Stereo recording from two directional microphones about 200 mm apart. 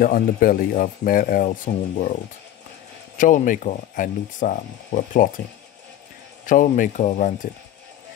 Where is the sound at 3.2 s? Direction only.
40° left (ahead or behind).